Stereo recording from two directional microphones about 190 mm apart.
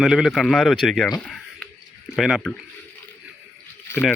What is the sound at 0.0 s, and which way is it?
Speech, centre (ahead or behind).